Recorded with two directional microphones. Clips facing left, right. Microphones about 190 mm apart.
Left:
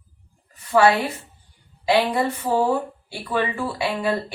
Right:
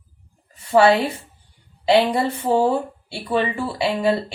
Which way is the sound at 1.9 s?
30° right (ahead or behind).